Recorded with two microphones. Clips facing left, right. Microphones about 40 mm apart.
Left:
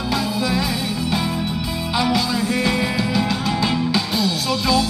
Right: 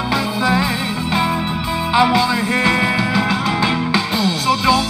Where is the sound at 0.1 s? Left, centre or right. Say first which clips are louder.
Right 4 dB; right.